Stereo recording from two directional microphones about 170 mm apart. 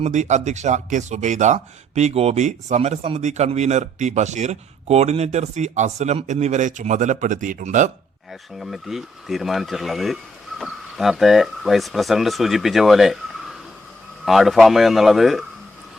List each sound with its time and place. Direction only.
0.0 s speech: 45° right (ahead or behind)
8.3 s speech: centre (ahead or behind)